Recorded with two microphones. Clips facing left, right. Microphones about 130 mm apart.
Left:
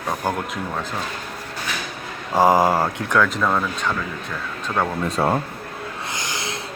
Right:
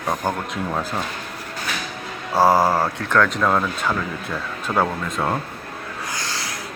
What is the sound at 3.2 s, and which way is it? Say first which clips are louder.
Speech: right 1 dB; centre (ahead or behind).